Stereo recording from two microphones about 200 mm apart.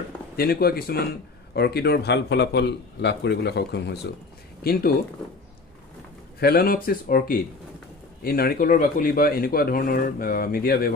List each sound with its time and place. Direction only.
0.4 s speech: 50° left (ahead or behind)
6.4 s speech: 50° left (ahead or behind)